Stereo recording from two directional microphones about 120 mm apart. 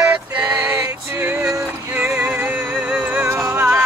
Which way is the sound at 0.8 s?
25° right (ahead or behind).